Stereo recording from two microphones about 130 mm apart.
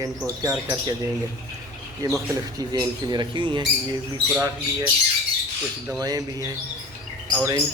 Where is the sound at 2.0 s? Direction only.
25° right (ahead or behind).